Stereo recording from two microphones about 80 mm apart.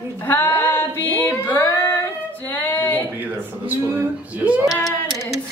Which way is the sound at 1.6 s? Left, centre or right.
Left.